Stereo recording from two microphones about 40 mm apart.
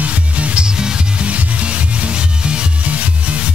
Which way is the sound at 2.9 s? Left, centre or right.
Right.